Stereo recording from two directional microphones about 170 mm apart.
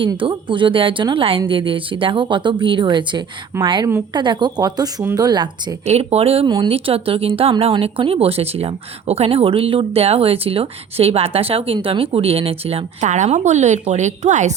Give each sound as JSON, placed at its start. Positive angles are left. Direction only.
{"t": 0.0, "sound": "a woman's voice", "side_deg": -30}
{"t": 5.8, "sound": "speech", "side_deg": -40}